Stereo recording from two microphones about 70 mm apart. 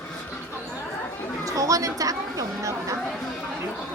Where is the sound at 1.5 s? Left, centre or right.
Right.